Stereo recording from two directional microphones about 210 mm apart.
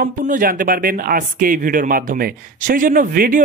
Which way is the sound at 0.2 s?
40° right (ahead or behind).